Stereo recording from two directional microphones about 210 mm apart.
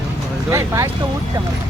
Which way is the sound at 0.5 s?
15° right (ahead or behind).